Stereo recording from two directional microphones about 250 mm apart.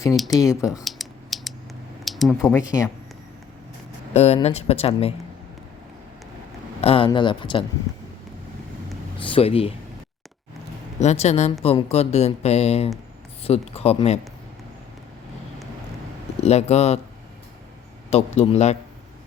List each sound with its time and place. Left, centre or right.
0.2 s speech: centre
0.4 s speech: centre
0.9 s a sound: centre
2.0 s speech: centre
4.1 s speech: left
6.8 s speech: left
7.9 s speech: centre
9.1 s speech: left
11.0 s speech: left
16.4 s speech: left
18.1 s speech: left